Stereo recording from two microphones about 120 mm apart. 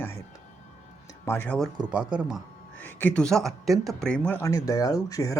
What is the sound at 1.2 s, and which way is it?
Speech, 20° left (ahead or behind).